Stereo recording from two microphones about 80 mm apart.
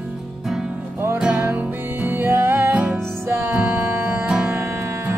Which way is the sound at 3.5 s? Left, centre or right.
Centre.